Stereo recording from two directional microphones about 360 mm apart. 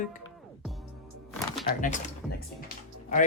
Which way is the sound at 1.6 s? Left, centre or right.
Left.